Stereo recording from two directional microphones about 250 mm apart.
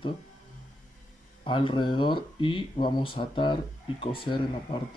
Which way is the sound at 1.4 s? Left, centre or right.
Left.